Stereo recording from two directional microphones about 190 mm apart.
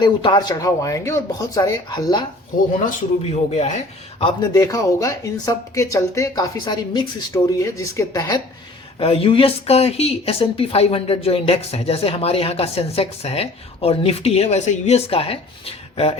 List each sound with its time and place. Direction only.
0.0 s speech: 25° left (ahead or behind)
2.7 s speech: 40° left (ahead or behind)
4.2 s speech: 25° left (ahead or behind)
9.0 s speech: 30° left (ahead or behind)